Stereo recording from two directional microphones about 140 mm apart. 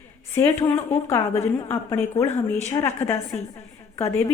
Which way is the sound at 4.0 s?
20° left (ahead or behind).